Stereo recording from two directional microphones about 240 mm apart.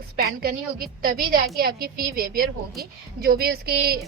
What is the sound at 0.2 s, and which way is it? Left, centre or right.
Speech, right.